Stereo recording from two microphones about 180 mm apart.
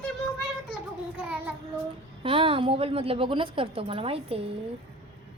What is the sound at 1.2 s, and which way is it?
Speech, 10° right (ahead or behind).